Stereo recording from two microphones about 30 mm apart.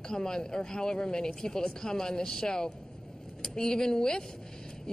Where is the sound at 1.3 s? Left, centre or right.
Left.